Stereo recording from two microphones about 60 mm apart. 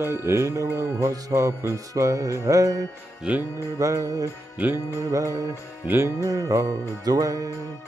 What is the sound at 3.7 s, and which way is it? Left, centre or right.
Music, right.